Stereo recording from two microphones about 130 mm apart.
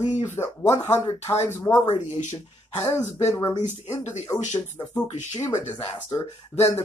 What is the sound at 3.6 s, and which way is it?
Speech, 65° left (ahead or behind).